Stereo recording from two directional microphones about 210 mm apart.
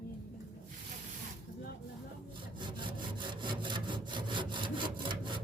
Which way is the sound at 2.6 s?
20° right (ahead or behind).